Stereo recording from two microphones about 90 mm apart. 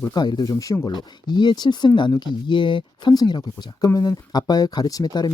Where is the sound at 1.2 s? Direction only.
55° left (ahead or behind).